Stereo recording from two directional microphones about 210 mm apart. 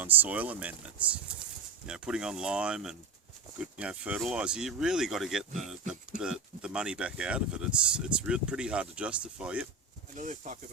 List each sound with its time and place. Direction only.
0.0 s speech: 10° right (ahead or behind)
10.2 s speech: 35° right (ahead or behind)